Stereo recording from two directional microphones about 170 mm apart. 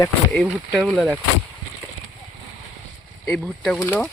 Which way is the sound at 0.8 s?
5° left (ahead or behind).